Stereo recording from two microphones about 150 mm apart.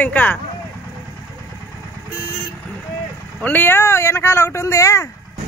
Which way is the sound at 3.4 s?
10° left (ahead or behind).